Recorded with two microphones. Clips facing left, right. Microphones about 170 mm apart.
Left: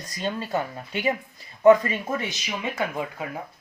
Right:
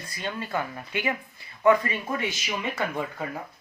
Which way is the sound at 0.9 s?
35° left (ahead or behind).